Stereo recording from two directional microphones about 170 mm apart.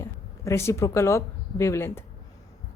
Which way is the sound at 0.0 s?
15° left (ahead or behind).